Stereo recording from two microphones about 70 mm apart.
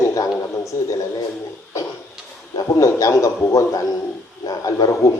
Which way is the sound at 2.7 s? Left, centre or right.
Left.